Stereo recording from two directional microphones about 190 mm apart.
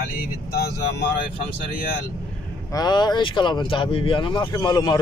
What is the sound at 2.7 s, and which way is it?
Speech, 20° left (ahead or behind).